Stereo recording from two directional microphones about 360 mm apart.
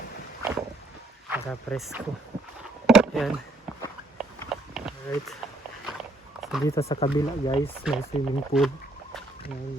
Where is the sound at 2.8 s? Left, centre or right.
Centre.